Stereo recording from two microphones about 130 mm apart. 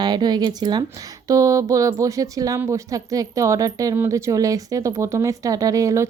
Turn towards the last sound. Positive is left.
turn(degrees=-25)  # may be behind; listen again after turning